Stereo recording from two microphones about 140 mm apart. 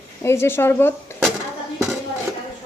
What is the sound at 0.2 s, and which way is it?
Speech, 20° left (ahead or behind).